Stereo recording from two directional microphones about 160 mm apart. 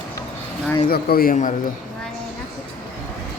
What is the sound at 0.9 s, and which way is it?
Speech, 70° left (ahead or behind).